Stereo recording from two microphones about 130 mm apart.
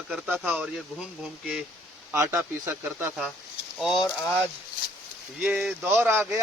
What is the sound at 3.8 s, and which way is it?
Speech, centre (ahead or behind).